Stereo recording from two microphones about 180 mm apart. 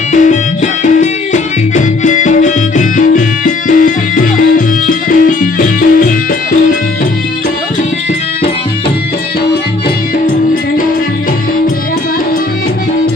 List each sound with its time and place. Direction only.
0.1 s music: 45° left (ahead or behind)